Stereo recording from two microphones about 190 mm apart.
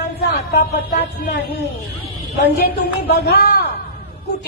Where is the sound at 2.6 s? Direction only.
55° left (ahead or behind).